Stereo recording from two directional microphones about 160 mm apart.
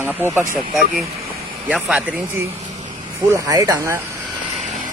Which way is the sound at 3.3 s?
20° right (ahead or behind).